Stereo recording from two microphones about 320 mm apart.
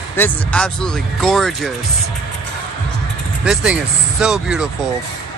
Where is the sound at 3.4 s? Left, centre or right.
Centre.